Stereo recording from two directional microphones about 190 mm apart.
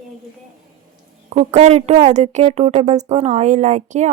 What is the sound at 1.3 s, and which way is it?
Speech, 40° right (ahead or behind).